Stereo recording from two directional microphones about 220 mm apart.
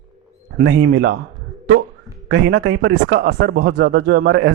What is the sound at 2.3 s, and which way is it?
Speech, 55° right (ahead or behind).